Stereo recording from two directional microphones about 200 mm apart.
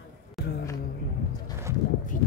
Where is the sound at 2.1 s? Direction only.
40° left (ahead or behind).